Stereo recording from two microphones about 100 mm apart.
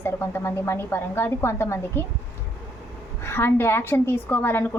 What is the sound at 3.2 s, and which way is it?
A woman's voice, 25° left (ahead or behind).